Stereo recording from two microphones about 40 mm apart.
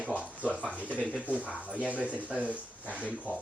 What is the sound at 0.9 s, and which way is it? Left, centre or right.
Speech, right.